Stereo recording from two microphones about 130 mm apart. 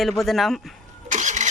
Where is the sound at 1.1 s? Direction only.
70° right (ahead or behind).